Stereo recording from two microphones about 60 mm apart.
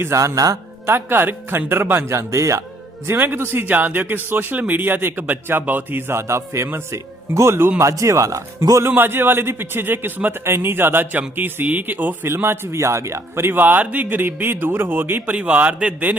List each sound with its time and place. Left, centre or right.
0.0 s speech: right
0.9 s speech: right
3.2 s speech: right
6.2 s a man's voice: right
7.8 s speech: right
9.0 s speech: right
12.3 s speech: right
15.4 s a man's voice: right